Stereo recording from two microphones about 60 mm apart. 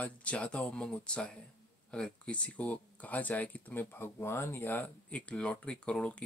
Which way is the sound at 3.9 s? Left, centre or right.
Left.